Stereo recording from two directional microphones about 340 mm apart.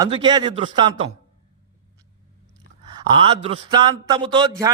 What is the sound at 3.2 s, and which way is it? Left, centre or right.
A man's voice, centre.